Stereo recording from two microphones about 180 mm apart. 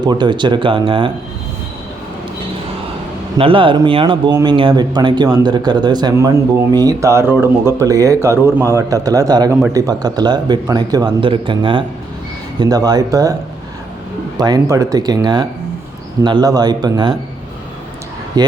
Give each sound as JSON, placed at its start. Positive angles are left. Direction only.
{"t": 0.0, "sound": "speech", "side_deg": -25}
{"t": 3.3, "sound": "speech", "side_deg": -30}
{"t": 14.3, "sound": "speech", "side_deg": -20}
{"t": 18.3, "sound": "speech", "side_deg": -20}